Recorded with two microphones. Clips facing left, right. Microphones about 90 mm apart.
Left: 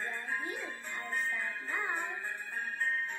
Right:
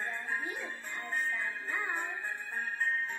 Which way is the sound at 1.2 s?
Centre (ahead or behind).